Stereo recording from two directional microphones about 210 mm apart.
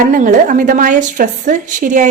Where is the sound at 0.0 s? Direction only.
40° right (ahead or behind).